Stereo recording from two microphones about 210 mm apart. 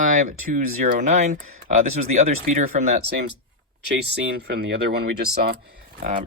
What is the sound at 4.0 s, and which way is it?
Speech, 50° right (ahead or behind).